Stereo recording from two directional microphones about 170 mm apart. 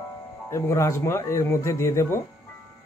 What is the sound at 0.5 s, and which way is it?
A man's voice, 15° left (ahead or behind).